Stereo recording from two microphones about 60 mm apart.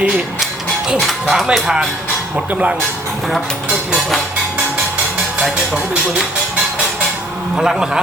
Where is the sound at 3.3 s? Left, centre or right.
Centre.